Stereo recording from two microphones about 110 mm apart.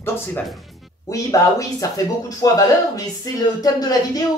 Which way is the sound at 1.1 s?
30° left (ahead or behind).